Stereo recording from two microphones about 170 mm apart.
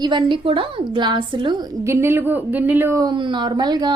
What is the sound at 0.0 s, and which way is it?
A woman's voice, 25° right (ahead or behind).